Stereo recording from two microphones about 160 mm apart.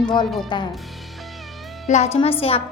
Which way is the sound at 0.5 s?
30° left (ahead or behind).